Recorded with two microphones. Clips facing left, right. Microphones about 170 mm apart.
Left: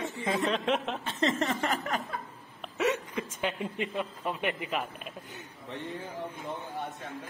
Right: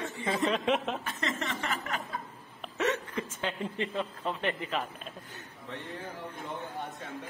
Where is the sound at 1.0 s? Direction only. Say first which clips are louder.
Left 6 dB; 30° left (ahead or behind).